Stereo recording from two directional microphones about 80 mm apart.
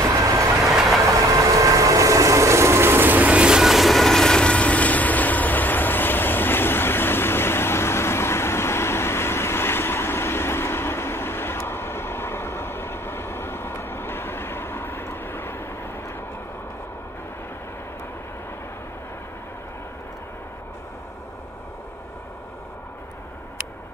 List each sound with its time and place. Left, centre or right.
0.0 s train: right
0.7 s vehicle: centre
1.1 s vehicle: right; by 15.9 s left